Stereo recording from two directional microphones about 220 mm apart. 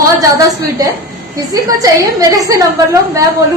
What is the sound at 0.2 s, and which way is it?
A woman's voice, 15° right (ahead or behind).